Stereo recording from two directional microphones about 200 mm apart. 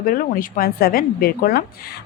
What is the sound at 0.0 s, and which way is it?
Speech, 45° left (ahead or behind).